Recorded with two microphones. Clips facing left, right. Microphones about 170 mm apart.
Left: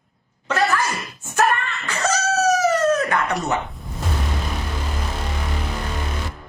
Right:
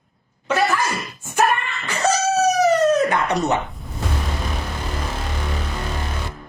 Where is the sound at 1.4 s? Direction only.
10° right (ahead or behind).